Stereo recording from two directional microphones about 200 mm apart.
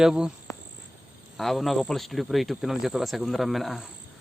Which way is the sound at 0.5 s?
15° left (ahead or behind).